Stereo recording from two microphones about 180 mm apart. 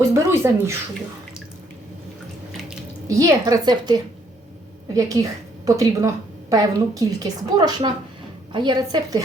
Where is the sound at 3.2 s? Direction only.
20° right (ahead or behind).